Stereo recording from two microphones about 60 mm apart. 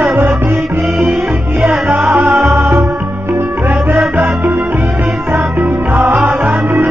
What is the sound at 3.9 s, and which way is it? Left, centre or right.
Music, right.